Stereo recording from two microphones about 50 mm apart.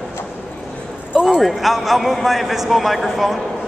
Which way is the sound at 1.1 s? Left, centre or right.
Centre.